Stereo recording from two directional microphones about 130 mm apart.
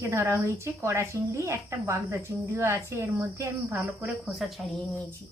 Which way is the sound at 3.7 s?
10° right (ahead or behind).